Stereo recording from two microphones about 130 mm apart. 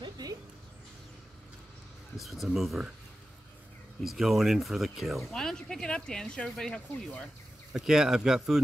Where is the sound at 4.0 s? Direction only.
Centre (ahead or behind).